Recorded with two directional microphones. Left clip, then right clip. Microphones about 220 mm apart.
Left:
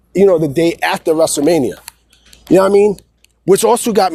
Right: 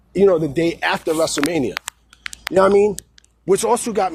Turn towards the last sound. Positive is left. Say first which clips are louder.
# left 6 dB
turn(degrees=40)  # may be behind; listen again after turning